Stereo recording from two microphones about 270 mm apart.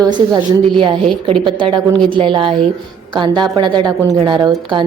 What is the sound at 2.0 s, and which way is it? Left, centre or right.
A woman's voice, centre.